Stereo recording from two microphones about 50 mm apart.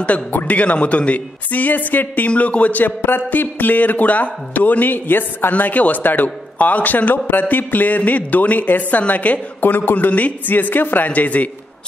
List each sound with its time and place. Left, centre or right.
0.0 s a woman's voice: left
9.9 s speech: left